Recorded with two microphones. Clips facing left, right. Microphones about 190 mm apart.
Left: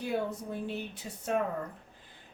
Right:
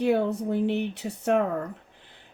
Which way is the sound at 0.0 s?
70° right (ahead or behind).